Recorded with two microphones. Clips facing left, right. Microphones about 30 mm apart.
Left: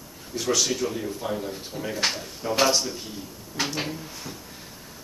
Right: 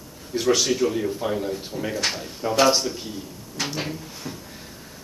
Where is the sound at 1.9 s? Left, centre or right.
Centre.